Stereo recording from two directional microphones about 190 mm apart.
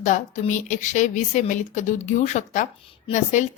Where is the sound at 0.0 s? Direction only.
40° left (ahead or behind).